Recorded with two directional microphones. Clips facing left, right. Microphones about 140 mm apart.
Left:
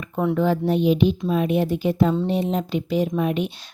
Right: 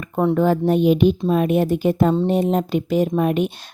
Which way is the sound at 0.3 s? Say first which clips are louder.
Right 3 dB; 45° right (ahead or behind).